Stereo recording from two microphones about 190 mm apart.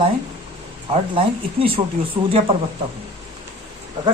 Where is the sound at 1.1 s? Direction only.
30° right (ahead or behind).